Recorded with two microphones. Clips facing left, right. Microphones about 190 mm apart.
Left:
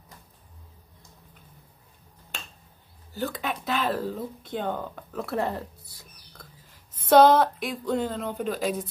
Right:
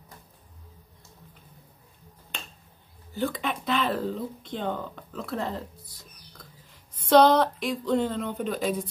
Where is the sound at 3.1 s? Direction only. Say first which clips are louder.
Right 2 dB; centre (ahead or behind).